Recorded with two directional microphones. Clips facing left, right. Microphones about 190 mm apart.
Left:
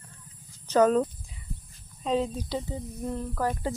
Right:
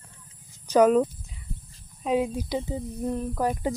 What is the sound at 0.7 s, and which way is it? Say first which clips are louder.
Speech: right 3 dB; 10° right (ahead or behind).